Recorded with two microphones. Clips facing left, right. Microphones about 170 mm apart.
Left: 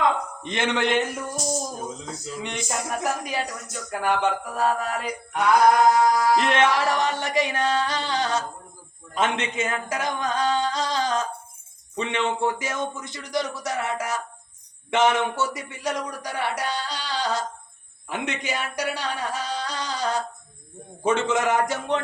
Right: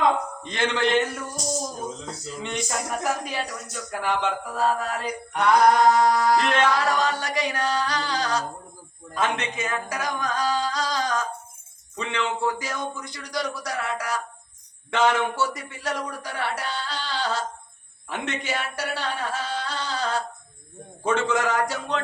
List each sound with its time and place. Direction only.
0.4 s a man's voice: 20° left (ahead or behind)
2.4 s speech: 15° left (ahead or behind)
5.3 s music: 5° left (ahead or behind)
6.3 s a man's voice: 20° left (ahead or behind)
9.1 s a sound: 25° left (ahead or behind)
11.9 s a man's voice: 25° left (ahead or behind)